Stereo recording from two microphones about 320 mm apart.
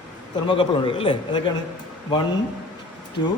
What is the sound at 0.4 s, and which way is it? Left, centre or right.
Speech, centre.